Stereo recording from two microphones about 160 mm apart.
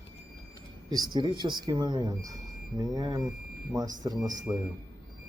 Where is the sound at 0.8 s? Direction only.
25° right (ahead or behind).